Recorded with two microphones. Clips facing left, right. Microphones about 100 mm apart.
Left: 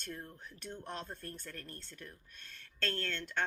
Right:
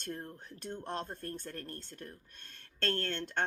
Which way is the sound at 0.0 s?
40° right (ahead or behind).